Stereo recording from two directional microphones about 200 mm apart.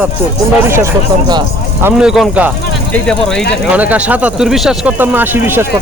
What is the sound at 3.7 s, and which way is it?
Speech, 5° right (ahead or behind).